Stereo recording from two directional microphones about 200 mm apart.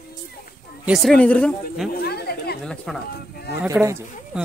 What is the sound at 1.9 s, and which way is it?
Chatter, 50° left (ahead or behind).